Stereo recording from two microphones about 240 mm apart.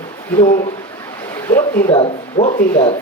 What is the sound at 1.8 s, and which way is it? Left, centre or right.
Speech, left.